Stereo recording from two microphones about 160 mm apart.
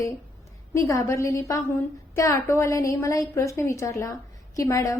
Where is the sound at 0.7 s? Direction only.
20° left (ahead or behind).